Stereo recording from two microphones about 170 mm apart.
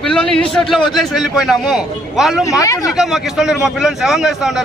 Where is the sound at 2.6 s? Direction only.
20° left (ahead or behind).